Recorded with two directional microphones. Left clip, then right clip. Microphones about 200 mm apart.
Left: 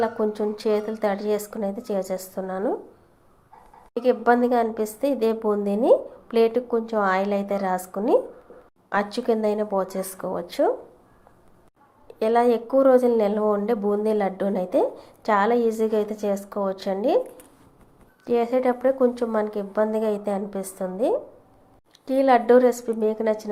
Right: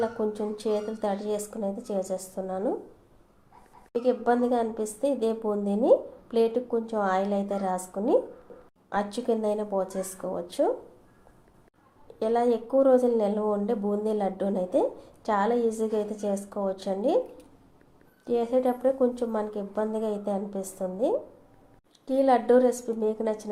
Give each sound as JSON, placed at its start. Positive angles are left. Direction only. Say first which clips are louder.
{"t": 0.0, "sound": "a woman's voice", "louder": "left 5 dB", "side_deg": 15}
{"t": 4.0, "sound": "a woman's voice", "louder": "left 6 dB", "side_deg": 20}
{"t": 12.0, "sound": "a woman's voice", "louder": "left 5 dB", "side_deg": 20}
{"t": 18.3, "sound": "a woman's voice", "louder": "left 4 dB", "side_deg": 15}